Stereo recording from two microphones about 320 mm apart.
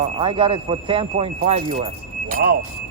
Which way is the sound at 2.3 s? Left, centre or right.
Right.